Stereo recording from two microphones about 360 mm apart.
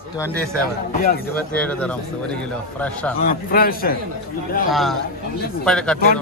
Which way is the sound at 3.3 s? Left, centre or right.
Left.